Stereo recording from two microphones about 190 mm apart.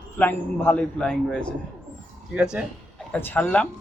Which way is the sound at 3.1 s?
10° left (ahead or behind).